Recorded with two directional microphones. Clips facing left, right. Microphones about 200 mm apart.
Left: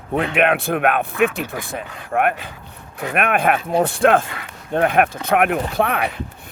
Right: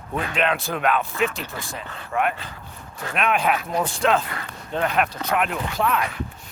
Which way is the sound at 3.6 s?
30° left (ahead or behind).